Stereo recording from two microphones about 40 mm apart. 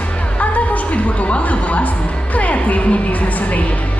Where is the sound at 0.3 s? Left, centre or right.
Left.